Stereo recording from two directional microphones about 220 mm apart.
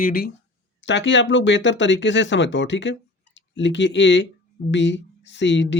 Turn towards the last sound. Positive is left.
turn(degrees=55)  # may be behind; listen again after turning